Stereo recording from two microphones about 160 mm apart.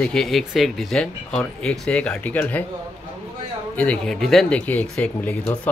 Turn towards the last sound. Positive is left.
turn(degrees=10)  # may be behind; listen again after turning